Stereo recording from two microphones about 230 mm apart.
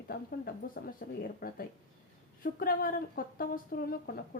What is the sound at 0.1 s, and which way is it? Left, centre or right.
A woman's voice, left.